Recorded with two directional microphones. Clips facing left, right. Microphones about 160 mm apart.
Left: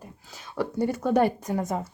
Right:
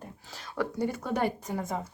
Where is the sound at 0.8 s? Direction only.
45° left (ahead or behind).